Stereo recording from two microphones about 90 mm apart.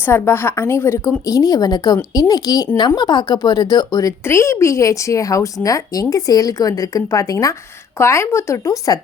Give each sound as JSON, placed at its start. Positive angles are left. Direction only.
{"t": 0.0, "sound": "a woman's voice", "side_deg": 25}
{"t": 4.3, "sound": "a woman's voice", "side_deg": 30}